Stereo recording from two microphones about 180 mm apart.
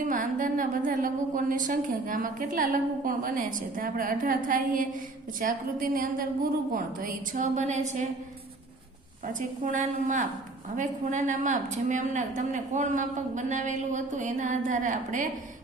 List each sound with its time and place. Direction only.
0.0 s a woman's voice: 45° right (ahead or behind)
9.2 s a woman's voice: 45° right (ahead or behind)